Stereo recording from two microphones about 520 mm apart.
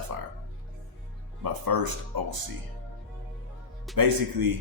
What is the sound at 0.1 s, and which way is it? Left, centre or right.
Music, right.